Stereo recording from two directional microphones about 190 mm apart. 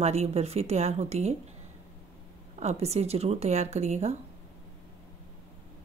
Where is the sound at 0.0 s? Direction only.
35° right (ahead or behind).